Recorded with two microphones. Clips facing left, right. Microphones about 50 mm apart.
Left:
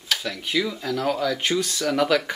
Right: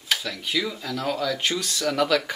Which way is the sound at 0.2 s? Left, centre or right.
Centre.